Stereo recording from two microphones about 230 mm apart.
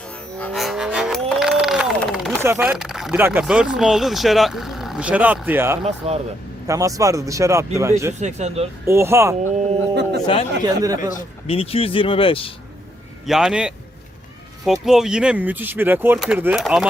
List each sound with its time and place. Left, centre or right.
0.3 s vehicle: centre
2.4 s speech: centre
6.0 s speech: right
6.7 s speech: centre
8.2 s speech: right
8.9 s speech: centre
9.9 s music: right
10.8 s speech: centre
11.1 s speech: left
13.2 s speech: centre